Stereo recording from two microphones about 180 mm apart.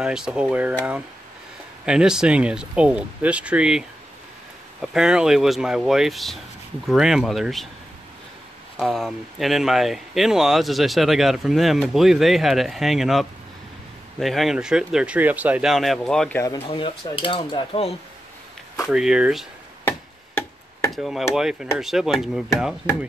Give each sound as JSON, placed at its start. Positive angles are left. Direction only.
{"t": 0.0, "sound": "speech", "side_deg": -5}
{"t": 1.9, "sound": "speech", "side_deg": -5}
{"t": 4.9, "sound": "speech", "side_deg": -5}
{"t": 8.7, "sound": "speech", "side_deg": 0}
{"t": 16.6, "sound": "speech", "side_deg": 30}
{"t": 18.9, "sound": "speech", "side_deg": -5}
{"t": 19.9, "sound": "a sound", "side_deg": 10}
{"t": 20.9, "sound": "speech", "side_deg": 0}